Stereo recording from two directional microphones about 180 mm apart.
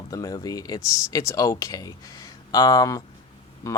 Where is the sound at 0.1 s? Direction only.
20° left (ahead or behind).